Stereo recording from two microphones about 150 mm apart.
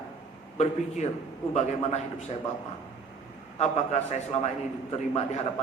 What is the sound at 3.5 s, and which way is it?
Speech, 50° left (ahead or behind).